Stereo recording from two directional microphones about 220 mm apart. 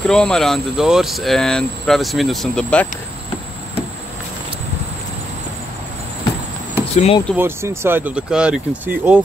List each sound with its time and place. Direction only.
0.0 s speech: 5° left (ahead or behind)
7.0 s speech: 25° left (ahead or behind)
7.3 s speech: 10° right (ahead or behind)